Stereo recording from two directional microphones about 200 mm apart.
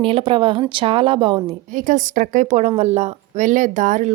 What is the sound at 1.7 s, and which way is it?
Speech, 40° right (ahead or behind).